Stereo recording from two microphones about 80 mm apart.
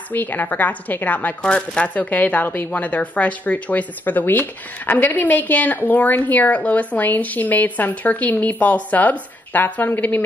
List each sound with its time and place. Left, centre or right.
0.1 s a woman's voice: left